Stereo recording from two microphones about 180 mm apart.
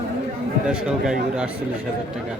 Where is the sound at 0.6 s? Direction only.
5° right (ahead or behind).